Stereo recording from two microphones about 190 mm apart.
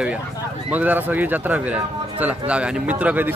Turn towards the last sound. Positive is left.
turn(degrees=-10)  # may be behind; listen again after turning